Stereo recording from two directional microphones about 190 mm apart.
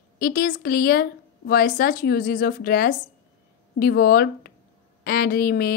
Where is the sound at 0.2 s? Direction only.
50° left (ahead or behind).